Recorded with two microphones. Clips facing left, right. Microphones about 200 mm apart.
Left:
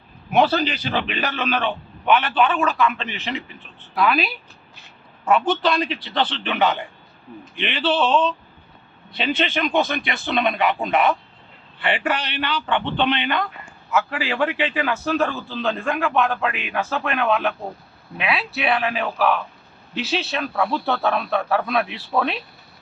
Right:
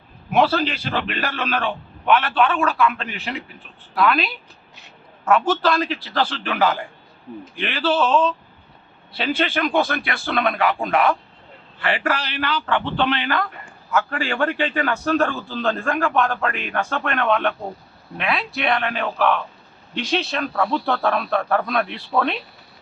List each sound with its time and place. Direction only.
0.3 s a man's voice: 5° left (ahead or behind)
5.5 s a man's voice: centre (ahead or behind)
9.6 s speech: 15° left (ahead or behind)
10.4 s a man's voice: centre (ahead or behind)
12.3 s a man's voice: centre (ahead or behind)